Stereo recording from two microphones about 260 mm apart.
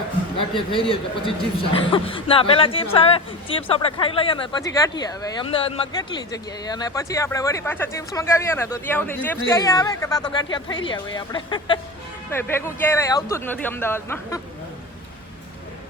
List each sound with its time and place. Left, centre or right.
0.3 s a man's voice: centre